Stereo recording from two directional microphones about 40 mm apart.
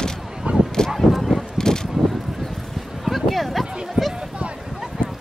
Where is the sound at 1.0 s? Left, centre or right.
Centre.